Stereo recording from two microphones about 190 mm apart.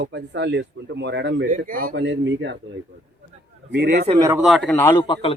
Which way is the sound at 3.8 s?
55° right (ahead or behind).